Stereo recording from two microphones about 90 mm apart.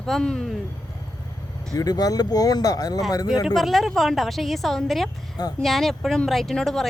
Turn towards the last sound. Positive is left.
turn(degrees=5)  # may be behind; listen again after turning